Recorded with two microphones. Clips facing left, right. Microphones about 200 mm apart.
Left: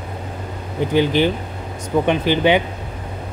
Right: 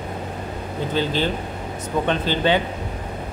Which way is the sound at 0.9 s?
15° left (ahead or behind).